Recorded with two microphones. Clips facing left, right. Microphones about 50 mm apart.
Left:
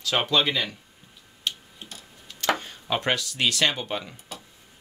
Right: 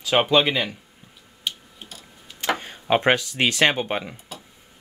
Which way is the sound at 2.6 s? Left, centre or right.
Right.